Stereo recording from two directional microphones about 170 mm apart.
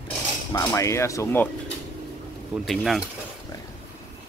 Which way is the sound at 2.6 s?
Centre (ahead or behind).